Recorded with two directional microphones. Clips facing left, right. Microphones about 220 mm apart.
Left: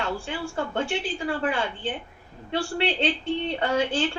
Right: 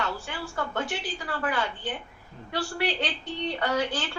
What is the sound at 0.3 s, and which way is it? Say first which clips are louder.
A woman's voice: left 4 dB; 30° left (ahead or behind).